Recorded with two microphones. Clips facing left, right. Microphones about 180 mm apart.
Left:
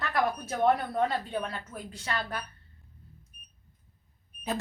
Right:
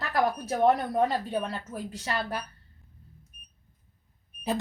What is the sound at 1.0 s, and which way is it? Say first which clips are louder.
Speech: right 2 dB; 15° right (ahead or behind).